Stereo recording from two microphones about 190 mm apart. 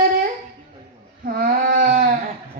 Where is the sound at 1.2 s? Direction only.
50° right (ahead or behind).